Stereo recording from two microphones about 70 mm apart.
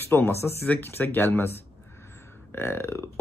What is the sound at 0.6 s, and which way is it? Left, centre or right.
Speech, left.